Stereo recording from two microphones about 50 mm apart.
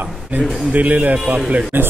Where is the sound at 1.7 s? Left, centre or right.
Right.